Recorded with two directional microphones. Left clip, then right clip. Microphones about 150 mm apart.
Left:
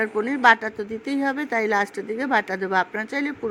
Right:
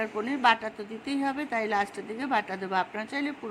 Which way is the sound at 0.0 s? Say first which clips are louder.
Left 7 dB; 25° left (ahead or behind).